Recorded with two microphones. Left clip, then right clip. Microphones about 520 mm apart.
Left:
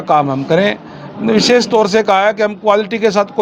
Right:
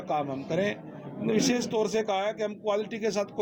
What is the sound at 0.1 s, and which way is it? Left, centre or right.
A man's voice, left.